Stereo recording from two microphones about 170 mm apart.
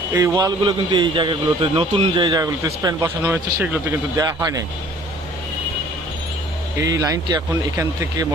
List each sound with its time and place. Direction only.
0.1 s a man's voice: 20° right (ahead or behind)
6.7 s a man's voice: 20° right (ahead or behind)